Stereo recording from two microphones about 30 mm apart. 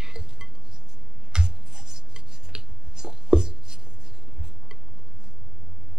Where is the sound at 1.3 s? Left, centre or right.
Right.